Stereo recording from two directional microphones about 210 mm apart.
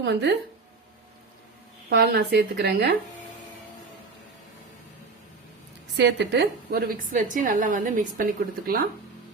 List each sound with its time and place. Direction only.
0.0 s speech: 55° right (ahead or behind)
1.9 s speech: 50° right (ahead or behind)
6.0 s a woman's voice: 55° right (ahead or behind)